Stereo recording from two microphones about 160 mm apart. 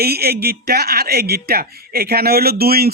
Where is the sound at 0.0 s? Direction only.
80° right.